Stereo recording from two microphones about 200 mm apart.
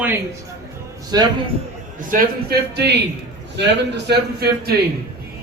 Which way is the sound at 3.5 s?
55° right (ahead or behind).